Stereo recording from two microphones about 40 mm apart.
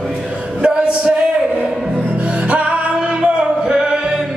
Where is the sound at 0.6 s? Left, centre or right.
Right.